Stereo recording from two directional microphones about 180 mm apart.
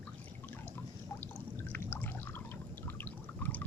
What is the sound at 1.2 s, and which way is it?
Pour, 10° left (ahead or behind).